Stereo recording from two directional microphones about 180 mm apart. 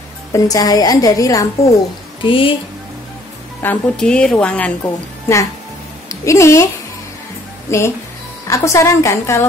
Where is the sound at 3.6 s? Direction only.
5° left (ahead or behind).